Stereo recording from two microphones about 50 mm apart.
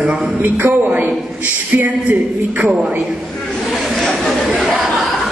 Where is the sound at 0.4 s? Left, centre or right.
Right.